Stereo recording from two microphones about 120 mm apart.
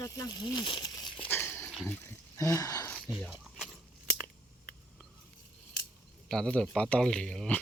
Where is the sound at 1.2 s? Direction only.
20° left (ahead or behind).